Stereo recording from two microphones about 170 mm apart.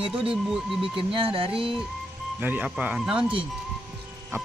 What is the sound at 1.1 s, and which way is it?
Speech, 35° right (ahead or behind).